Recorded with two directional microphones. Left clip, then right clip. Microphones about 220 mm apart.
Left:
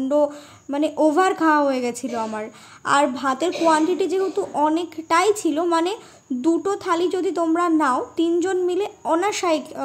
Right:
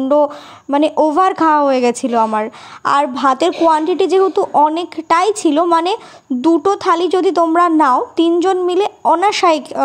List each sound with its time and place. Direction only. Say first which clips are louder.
0.1 s a woman's voice: right 7 dB; 25° right (ahead or behind)